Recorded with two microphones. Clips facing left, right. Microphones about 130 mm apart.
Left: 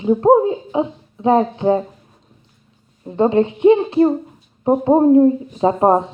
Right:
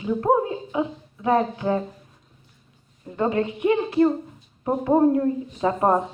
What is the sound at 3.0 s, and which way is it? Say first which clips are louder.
A woman's voice: left 8 dB; 25° left (ahead or behind).